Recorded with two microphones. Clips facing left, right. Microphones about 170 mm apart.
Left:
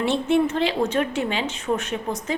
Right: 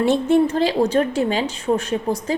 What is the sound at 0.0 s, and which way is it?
A woman's voice, 40° right (ahead or behind).